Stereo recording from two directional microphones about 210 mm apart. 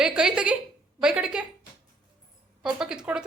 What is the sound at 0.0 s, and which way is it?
A woman's voice, 5° right (ahead or behind).